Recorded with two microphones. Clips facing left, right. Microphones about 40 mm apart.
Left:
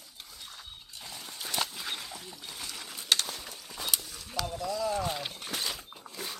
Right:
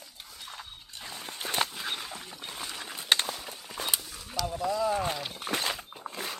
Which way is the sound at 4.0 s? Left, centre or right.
Centre.